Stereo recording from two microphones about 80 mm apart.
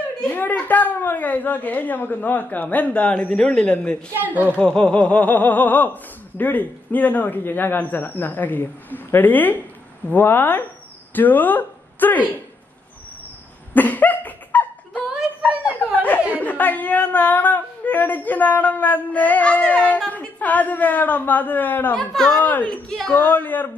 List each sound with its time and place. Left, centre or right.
0.3 s snicker: left
4.2 s a woman's voice: right
4.5 s snicker: centre
11.1 s a woman's voice: left
13.7 s cough: left
15.9 s speech: left
20.1 s snicker: centre
21.9 s a man's voice: centre
22.4 s snicker: left
22.8 s a man's voice: centre
23.1 s snicker: left